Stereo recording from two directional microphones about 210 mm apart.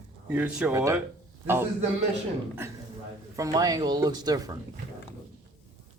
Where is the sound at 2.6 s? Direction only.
10° right (ahead or behind).